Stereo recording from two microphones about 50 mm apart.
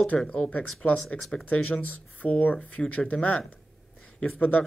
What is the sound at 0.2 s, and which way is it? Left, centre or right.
Speech, centre.